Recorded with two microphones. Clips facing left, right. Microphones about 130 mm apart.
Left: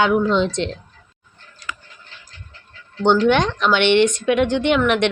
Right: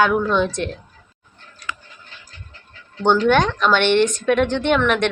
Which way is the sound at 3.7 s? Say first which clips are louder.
Left 2 dB; 50° right (ahead or behind).